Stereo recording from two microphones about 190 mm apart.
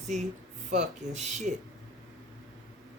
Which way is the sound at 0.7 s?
40° right (ahead or behind).